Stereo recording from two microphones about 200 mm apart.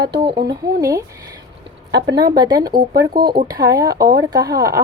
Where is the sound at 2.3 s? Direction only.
20° right (ahead or behind).